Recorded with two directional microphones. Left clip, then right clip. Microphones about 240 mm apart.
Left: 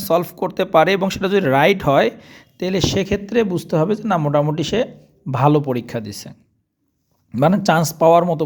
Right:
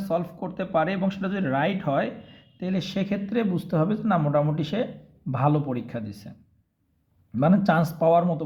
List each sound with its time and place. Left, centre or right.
0.0 s speech: left
7.3 s speech: left